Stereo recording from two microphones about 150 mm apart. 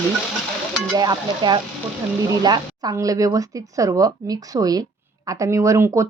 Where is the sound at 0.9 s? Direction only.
25° right (ahead or behind).